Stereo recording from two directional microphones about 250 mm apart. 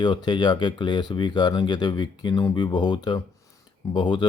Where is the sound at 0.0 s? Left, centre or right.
Centre.